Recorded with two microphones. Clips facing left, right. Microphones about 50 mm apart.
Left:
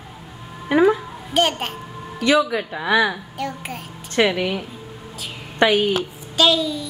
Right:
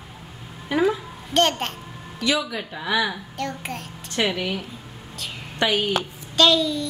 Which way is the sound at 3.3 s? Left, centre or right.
Centre.